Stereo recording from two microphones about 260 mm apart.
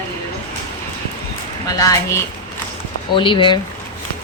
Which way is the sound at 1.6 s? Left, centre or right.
Centre.